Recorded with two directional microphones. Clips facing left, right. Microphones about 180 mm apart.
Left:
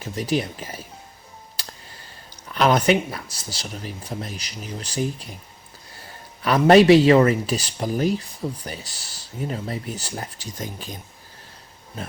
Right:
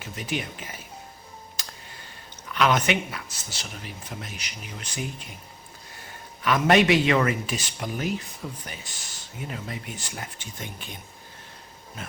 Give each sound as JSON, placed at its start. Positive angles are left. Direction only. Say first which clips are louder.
{"t": 0.0, "sound": "speech", "louder": "left 7 dB", "side_deg": 35}
{"t": 1.6, "sound": "music", "louder": "left 6 dB", "side_deg": 35}
{"t": 2.5, "sound": "speech", "louder": "left 5 dB", "side_deg": 35}
{"t": 6.4, "sound": "speech", "louder": "left 6 dB", "side_deg": 35}